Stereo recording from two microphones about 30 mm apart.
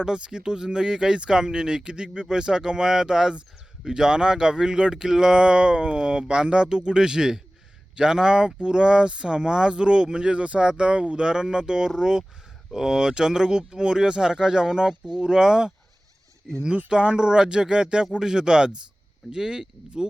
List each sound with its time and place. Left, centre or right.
0.0 s speech: right
17.2 s speech: right